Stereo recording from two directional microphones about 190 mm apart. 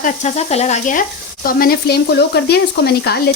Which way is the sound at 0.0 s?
35° left (ahead or behind).